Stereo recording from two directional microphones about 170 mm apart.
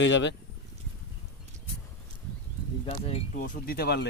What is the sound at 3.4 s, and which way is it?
Speech, 50° left (ahead or behind).